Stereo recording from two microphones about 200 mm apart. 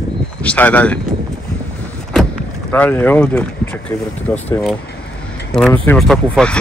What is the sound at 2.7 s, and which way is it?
Speech, 10° left (ahead or behind).